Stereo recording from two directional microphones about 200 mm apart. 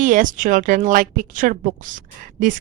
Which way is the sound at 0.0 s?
40° right (ahead or behind).